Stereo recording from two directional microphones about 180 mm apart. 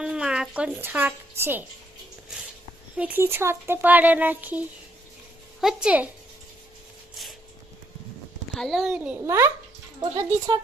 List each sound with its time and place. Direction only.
0.0 s speech: 5° right (ahead or behind)
3.0 s a child's voice: 10° right (ahead or behind)
8.5 s a child's voice: centre (ahead or behind); by 10.6 s 20° right (ahead or behind)